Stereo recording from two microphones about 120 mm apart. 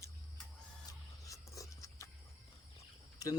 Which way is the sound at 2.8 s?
30° left (ahead or behind).